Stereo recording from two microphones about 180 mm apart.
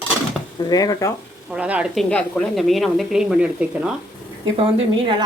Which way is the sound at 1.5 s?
5° right (ahead or behind).